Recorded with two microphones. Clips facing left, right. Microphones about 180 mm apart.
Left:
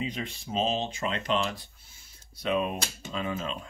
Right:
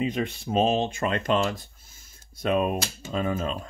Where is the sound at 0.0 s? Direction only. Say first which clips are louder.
Right 7 dB; 55° right (ahead or behind).